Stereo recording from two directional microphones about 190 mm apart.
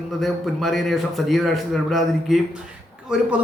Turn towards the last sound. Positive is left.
turn(degrees=-5)  # may be behind; listen again after turning